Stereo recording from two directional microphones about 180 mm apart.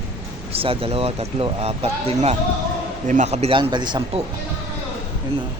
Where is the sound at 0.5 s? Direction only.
30° right (ahead or behind).